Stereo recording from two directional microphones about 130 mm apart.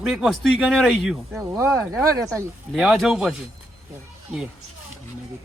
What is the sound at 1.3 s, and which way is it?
Speech, 25° right (ahead or behind).